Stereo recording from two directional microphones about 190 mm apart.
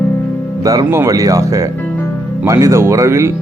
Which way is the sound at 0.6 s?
20° right (ahead or behind).